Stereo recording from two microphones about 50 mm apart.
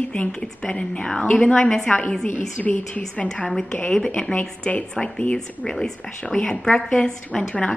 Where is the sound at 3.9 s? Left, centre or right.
Centre.